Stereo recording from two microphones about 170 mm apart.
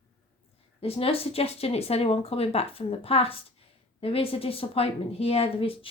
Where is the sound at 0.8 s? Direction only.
35° left (ahead or behind).